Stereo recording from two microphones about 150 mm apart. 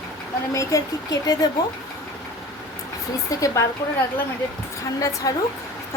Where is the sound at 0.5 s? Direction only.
20° left (ahead or behind).